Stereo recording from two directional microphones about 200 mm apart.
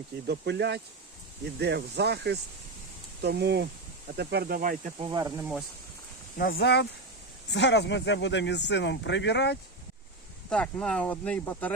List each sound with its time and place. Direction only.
0.3 s speech: 55° right (ahead or behind)
4.9 s speech: 20° right (ahead or behind)
6.3 s speech: 50° left (ahead or behind)
10.5 s speech: 5° left (ahead or behind)